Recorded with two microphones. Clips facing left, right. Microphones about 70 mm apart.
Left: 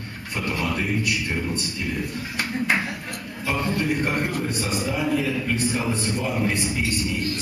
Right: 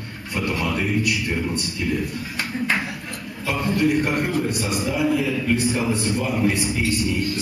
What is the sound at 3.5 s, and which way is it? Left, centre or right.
A man's voice, centre.